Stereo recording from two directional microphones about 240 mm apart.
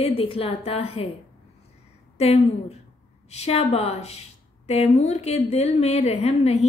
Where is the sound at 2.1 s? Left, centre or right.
Left.